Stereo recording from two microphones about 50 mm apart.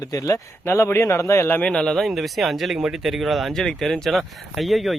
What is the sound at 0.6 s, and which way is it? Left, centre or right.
Speech, left.